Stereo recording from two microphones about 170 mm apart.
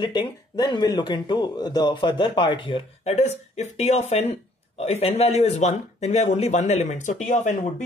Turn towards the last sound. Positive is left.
turn(degrees=45)  # may be behind; listen again after turning